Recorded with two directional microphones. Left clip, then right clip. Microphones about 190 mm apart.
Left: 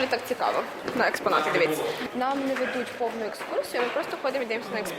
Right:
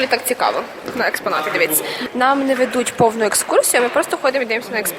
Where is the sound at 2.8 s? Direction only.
35° right (ahead or behind).